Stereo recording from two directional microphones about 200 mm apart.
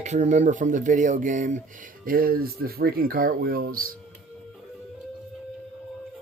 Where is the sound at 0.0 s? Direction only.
35° right (ahead or behind).